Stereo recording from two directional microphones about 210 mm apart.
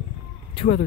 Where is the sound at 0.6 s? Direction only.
30° left (ahead or behind).